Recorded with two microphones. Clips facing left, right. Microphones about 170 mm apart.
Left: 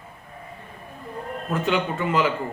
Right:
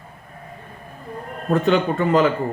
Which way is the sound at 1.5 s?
40° right (ahead or behind).